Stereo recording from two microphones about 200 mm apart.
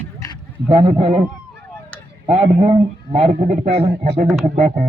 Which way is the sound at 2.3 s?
30° right (ahead or behind).